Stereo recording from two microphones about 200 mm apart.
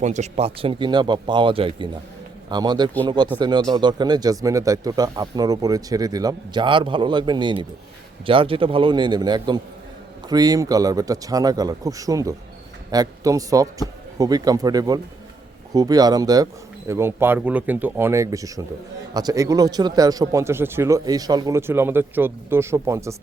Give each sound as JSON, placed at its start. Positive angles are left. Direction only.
{"t": 0.0, "sound": "speech", "side_deg": -35}